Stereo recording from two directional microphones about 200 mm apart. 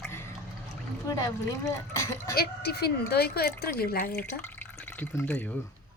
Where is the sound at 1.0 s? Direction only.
15° left (ahead or behind).